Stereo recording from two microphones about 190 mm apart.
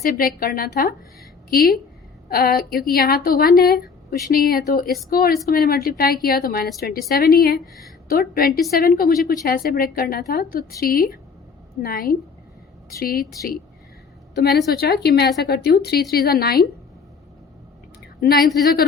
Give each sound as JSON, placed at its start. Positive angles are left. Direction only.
{"t": 0.0, "sound": "a woman's voice", "side_deg": 50}
{"t": 7.6, "sound": "a woman's voice", "side_deg": 0}
{"t": 8.0, "sound": "a woman's voice", "side_deg": 50}
{"t": 14.3, "sound": "speech", "side_deg": 60}
{"t": 18.2, "sound": "a woman's voice", "side_deg": 50}